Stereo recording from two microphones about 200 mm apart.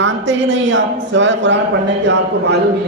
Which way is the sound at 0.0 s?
65° right (ahead or behind).